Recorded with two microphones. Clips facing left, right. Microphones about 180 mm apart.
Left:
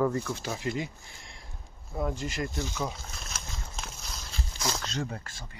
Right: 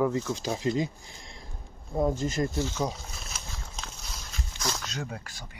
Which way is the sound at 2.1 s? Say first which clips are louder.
Right 5 dB; 45° right (ahead or behind).